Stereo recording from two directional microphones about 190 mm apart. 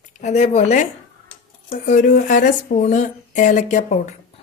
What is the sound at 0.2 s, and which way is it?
Speech, 35° left (ahead or behind).